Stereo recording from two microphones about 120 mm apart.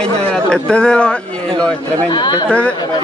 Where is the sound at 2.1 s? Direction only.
40° left (ahead or behind).